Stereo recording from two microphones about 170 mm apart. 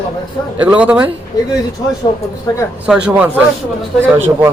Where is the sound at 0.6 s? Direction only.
10° right (ahead or behind).